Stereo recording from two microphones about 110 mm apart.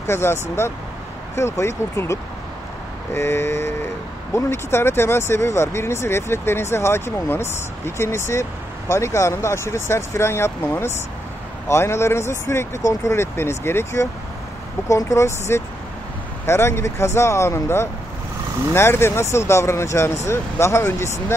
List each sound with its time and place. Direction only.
0.0 s speech: 25° left (ahead or behind)